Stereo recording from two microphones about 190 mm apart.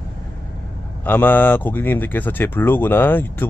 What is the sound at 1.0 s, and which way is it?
Speech, 10° left (ahead or behind).